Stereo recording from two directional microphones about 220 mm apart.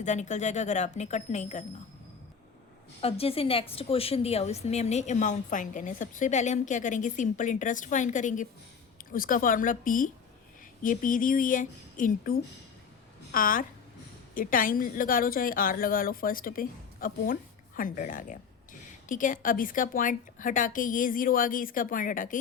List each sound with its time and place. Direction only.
0.0 s a woman's voice: 35° left (ahead or behind)
3.0 s a woman's voice: 25° left (ahead or behind)